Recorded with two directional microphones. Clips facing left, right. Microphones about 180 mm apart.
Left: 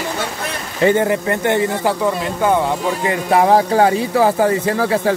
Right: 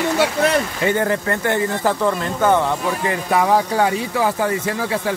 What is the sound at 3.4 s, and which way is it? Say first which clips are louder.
Speech: left 4 dB; 35° left (ahead or behind).